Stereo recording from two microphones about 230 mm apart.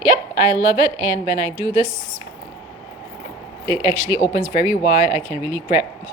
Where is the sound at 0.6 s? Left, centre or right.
Centre.